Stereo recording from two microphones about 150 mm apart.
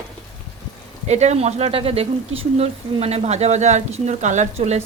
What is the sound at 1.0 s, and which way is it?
Speech, 50° right (ahead or behind).